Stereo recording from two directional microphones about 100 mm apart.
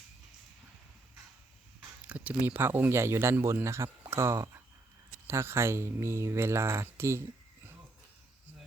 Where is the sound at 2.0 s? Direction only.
15° right (ahead or behind).